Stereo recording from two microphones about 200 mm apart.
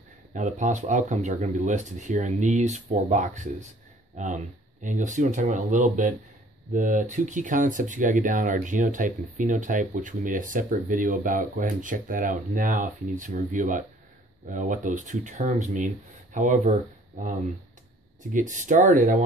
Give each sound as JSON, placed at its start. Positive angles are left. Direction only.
{"t": 0.3, "sound": "speech", "side_deg": -40}